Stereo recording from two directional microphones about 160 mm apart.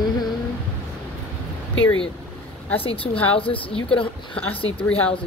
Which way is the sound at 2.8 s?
35° left (ahead or behind).